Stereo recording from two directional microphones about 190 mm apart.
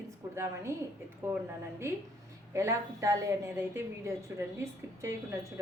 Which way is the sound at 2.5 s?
15° right (ahead or behind).